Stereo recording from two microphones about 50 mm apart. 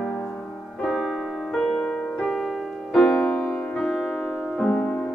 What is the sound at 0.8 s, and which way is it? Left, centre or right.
Music, centre.